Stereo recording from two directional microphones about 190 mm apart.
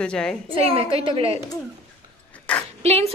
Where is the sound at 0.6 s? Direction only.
30° right (ahead or behind).